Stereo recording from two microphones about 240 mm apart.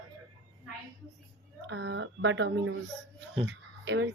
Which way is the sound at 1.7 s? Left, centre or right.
Right.